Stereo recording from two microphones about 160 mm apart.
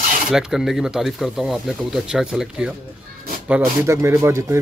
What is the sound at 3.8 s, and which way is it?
Speech, 20° right (ahead or behind).